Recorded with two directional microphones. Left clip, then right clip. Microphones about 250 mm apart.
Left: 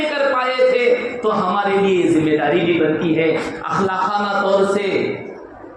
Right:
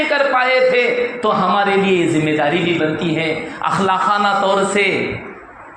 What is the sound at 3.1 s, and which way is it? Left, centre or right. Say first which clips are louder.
A man's voice: left 2 dB; right.